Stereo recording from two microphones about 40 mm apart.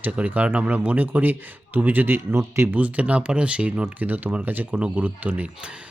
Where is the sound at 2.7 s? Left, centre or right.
Right.